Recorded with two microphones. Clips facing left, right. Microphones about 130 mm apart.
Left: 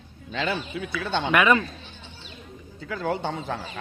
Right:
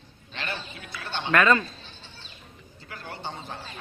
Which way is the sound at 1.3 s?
15° left (ahead or behind).